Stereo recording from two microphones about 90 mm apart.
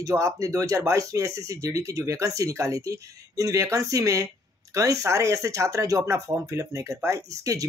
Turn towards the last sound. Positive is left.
turn(degrees=-35)  # may be behind; listen again after turning